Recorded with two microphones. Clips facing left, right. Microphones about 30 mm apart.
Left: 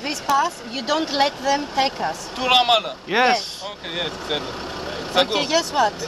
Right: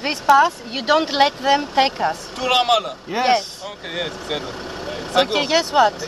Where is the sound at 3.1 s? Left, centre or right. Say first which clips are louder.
Left 3 dB; left.